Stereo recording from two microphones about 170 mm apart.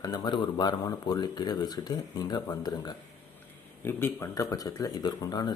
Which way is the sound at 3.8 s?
15° left (ahead or behind).